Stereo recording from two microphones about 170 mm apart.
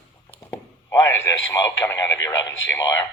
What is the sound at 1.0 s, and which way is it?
Speech, 15° left (ahead or behind).